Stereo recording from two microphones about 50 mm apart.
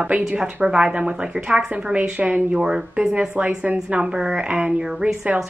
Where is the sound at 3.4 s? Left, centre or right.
Right.